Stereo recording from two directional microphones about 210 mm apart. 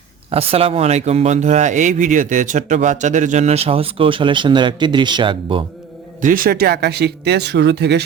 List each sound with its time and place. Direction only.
0.3 s speech: 30° right (ahead or behind)
6.2 s speech: 40° right (ahead or behind)